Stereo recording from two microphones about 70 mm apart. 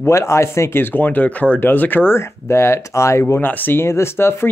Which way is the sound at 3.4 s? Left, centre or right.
Left.